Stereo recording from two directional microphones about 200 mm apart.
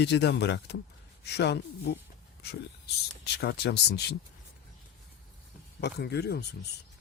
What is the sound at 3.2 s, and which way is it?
Speech, 55° left (ahead or behind).